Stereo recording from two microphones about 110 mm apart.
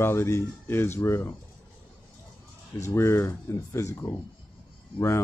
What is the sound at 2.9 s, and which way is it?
Speech, 25° left (ahead or behind).